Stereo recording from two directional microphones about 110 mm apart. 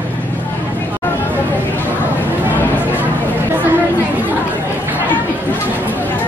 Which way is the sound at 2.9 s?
15° right (ahead or behind).